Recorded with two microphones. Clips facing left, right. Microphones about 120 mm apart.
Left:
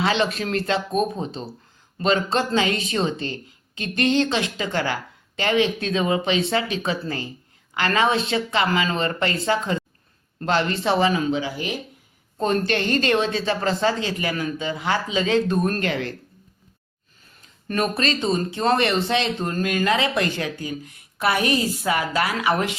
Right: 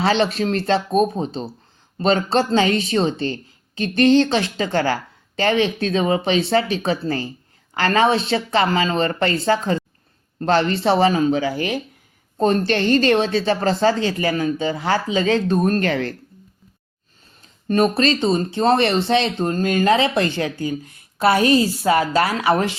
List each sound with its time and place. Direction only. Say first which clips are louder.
0.0 s speech: right 4 dB; 35° right (ahead or behind)
17.7 s speech: right 6 dB; 30° right (ahead or behind)